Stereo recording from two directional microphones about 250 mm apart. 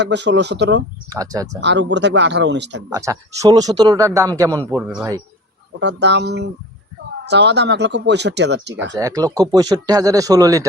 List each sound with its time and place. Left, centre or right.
0.0 s speech: right
1.1 s speech: centre
1.6 s speech: right
2.9 s speech: centre
5.8 s speech: right
9.0 s speech: centre